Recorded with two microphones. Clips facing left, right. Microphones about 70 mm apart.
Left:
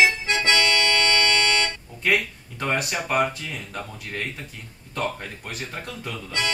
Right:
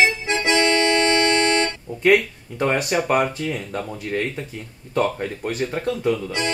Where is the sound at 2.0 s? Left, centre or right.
Centre.